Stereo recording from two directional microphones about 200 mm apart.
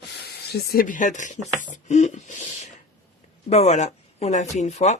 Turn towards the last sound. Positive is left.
turn(degrees=35)  # may be behind; listen again after turning